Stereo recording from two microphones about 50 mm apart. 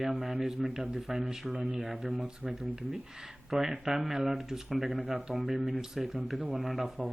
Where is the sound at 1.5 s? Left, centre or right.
Centre.